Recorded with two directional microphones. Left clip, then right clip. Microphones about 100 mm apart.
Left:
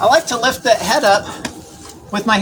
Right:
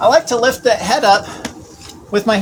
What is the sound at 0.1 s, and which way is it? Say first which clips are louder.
Speech: right 1 dB; 30° right (ahead or behind).